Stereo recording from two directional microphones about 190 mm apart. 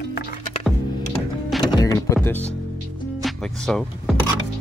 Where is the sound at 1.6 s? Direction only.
20° left (ahead or behind).